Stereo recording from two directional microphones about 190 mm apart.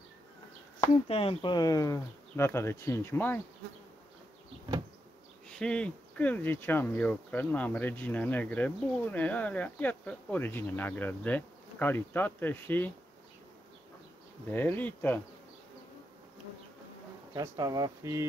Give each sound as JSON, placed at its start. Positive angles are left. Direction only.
{"t": 0.7, "sound": "speech", "side_deg": 30}
{"t": 5.5, "sound": "speech", "side_deg": 5}
{"t": 14.5, "sound": "speech", "side_deg": 10}
{"t": 17.3, "sound": "speech", "side_deg": -20}